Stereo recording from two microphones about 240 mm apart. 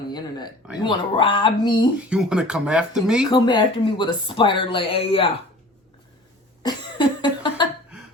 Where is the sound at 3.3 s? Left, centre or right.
Centre.